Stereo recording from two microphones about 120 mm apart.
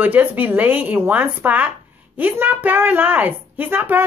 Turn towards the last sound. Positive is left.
turn(degrees=-15)  # may be behind; listen again after turning